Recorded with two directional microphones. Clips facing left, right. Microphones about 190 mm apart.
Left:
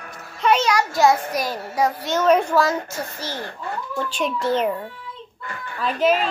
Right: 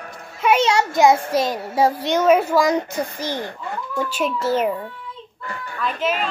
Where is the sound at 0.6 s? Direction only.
20° right (ahead or behind).